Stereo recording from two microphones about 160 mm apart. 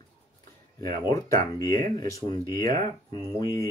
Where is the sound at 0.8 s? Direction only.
25° left (ahead or behind).